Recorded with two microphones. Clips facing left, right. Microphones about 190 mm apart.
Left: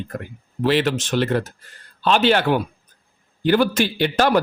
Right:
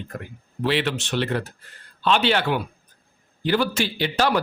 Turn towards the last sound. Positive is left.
turn(degrees=50)  # may be behind; listen again after turning